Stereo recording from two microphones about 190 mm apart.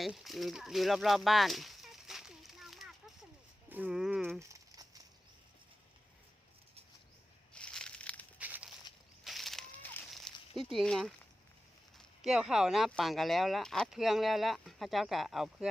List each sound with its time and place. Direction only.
0.0 s a sound: centre (ahead or behind)
3.7 s livestock: 10° right (ahead or behind)
4.4 s crumpling: 15° right (ahead or behind)
7.5 s crushing: 5° left (ahead or behind)
8.4 s a sound: 10° right (ahead or behind)
10.6 s speech: centre (ahead or behind)